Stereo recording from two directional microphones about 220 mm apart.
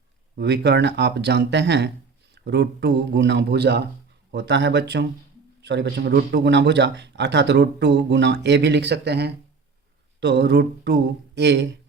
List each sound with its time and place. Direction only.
0.3 s speech: 50° right (ahead or behind)